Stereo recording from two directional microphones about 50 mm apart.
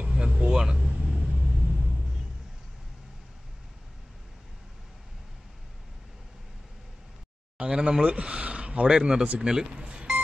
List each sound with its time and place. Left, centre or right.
0.0 s vehicle: centre
7.5 s a sound: right
8.9 s speech: centre